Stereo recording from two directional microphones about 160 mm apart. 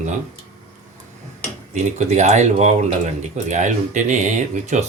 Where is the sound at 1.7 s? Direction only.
45° right (ahead or behind).